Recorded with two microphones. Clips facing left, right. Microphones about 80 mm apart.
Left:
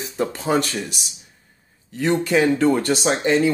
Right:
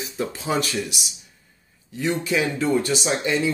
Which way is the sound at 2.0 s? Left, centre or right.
Left.